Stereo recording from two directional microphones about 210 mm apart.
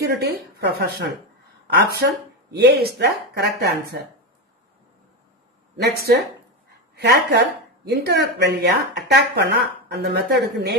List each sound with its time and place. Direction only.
0.1 s speech: 50° right (ahead or behind)
5.8 s speech: 50° right (ahead or behind)